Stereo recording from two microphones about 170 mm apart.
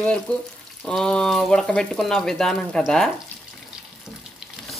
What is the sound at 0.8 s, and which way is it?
Frying, 5° left (ahead or behind).